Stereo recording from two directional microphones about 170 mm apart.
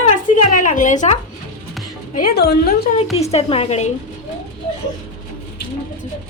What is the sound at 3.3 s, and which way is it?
Speech, 35° left (ahead or behind).